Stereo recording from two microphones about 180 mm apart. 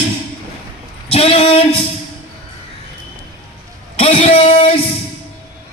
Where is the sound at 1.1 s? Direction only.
35° left (ahead or behind).